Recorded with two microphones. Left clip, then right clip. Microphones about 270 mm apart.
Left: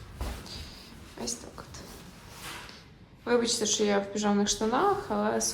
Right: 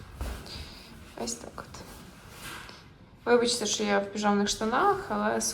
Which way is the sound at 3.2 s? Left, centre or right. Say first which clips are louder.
Right 2 dB; centre.